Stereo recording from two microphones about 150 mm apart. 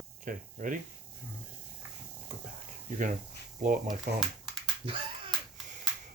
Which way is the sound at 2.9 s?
60° right (ahead or behind).